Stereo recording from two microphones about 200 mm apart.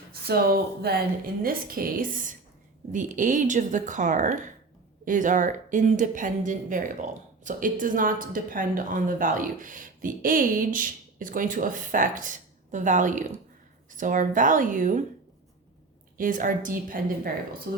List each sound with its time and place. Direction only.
0.1 s a woman's voice: 50° right (ahead or behind)
16.1 s a woman's voice: 45° right (ahead or behind)